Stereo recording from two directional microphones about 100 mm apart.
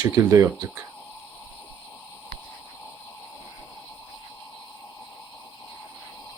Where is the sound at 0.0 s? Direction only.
30° right (ahead or behind).